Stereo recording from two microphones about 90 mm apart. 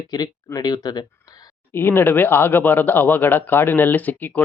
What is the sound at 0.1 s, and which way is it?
Speech, 50° left (ahead or behind).